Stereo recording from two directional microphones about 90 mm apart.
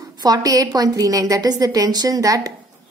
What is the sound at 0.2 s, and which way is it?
A woman's voice, 45° right (ahead or behind).